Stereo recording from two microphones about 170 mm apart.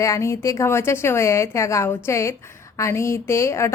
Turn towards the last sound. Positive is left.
turn(degrees=15)  # may be behind; listen again after turning